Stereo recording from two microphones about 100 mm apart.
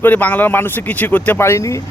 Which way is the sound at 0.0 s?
15° left (ahead or behind).